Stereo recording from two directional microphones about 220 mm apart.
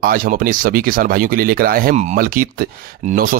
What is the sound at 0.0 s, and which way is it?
Speech, 40° right (ahead or behind).